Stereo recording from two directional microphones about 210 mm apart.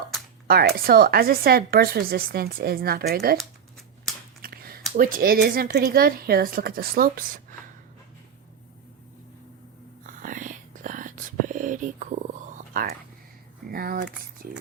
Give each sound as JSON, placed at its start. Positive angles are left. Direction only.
{"t": 0.4, "sound": "speech", "side_deg": -45}
{"t": 4.4, "sound": "speech", "side_deg": -45}
{"t": 10.1, "sound": "whispering", "side_deg": -40}
{"t": 13.7, "sound": "speech", "side_deg": -45}